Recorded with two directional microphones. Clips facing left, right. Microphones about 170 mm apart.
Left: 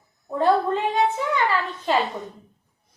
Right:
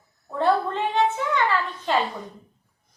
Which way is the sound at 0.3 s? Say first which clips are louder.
Left 2 dB; 15° left (ahead or behind).